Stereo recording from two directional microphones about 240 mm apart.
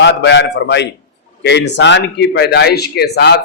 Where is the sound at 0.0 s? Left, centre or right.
Left.